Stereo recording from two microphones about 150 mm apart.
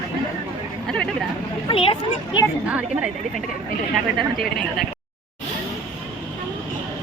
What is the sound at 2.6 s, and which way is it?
Speech, 10° right (ahead or behind).